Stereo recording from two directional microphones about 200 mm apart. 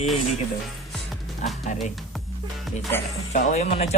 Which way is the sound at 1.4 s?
35° left (ahead or behind).